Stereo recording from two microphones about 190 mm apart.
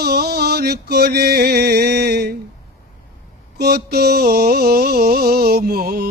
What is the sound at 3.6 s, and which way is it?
Music, 55° right (ahead or behind).